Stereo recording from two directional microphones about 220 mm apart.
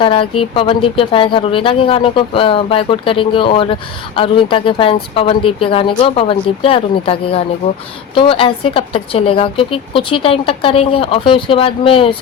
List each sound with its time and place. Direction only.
0.0 s speech: 25° left (ahead or behind)